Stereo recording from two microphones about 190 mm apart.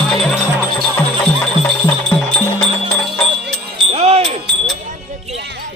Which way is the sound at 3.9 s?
30° right (ahead or behind).